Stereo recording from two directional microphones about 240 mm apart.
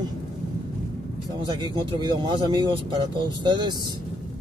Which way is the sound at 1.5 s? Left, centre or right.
Centre.